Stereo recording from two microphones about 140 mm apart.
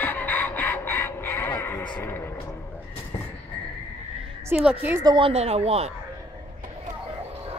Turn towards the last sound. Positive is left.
turn(degrees=-50)  # may be behind; listen again after turning